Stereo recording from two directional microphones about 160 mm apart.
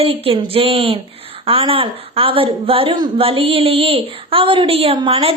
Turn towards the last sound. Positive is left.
turn(degrees=-35)  # may be behind; listen again after turning